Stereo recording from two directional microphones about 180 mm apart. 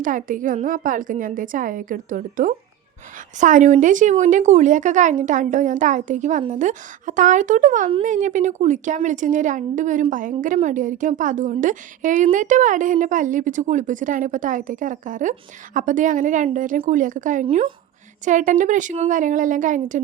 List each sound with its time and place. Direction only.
0.0 s a woman's voice: 50° right (ahead or behind)
17.4 s a woman's voice: 35° right (ahead or behind)